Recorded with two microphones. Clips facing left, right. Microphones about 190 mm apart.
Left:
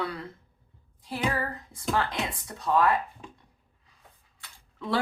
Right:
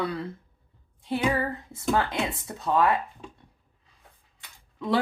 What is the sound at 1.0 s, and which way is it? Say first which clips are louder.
Speech: right 4 dB; 25° right (ahead or behind).